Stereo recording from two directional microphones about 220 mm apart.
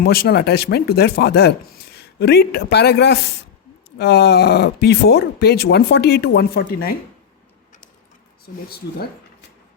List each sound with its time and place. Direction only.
0.0 s speech: 45° left (ahead or behind)